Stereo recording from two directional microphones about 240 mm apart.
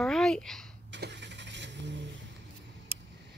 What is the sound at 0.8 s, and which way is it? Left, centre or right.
Vehicle, right.